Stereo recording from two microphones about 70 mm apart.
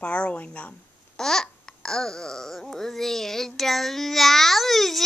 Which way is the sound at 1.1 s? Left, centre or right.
Centre.